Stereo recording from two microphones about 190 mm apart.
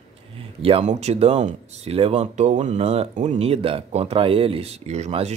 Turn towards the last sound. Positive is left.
turn(degrees=-35)  # may be behind; listen again after turning